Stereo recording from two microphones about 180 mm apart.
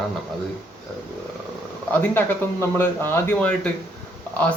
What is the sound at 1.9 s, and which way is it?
Speech, 10° left (ahead or behind).